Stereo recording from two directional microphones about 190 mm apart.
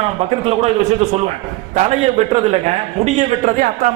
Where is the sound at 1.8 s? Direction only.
35° right (ahead or behind).